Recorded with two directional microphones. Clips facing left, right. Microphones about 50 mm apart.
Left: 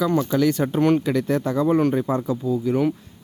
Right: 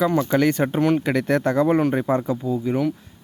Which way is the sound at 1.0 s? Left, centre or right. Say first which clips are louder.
Right 2 dB; right.